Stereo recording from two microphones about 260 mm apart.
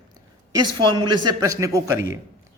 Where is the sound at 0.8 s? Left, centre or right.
Centre.